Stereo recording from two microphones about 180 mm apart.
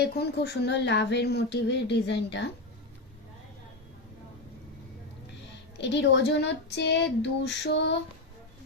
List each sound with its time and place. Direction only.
0.0 s speech: 65° left (ahead or behind)
5.7 s speech: 75° left (ahead or behind)